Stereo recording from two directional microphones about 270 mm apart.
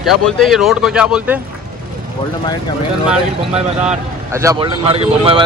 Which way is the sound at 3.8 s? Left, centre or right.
Centre.